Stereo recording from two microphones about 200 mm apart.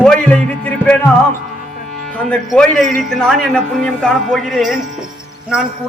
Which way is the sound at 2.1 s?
5° left (ahead or behind).